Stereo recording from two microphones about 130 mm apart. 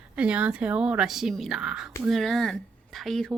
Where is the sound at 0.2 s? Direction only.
10° right (ahead or behind).